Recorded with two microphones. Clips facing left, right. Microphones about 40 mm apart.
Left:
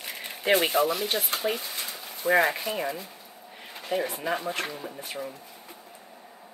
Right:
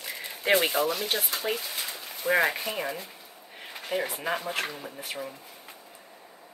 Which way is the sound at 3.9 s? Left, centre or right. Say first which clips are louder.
Left 2 dB; right.